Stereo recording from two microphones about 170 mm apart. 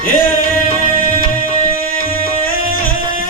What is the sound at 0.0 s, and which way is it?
Music, 55° left (ahead or behind).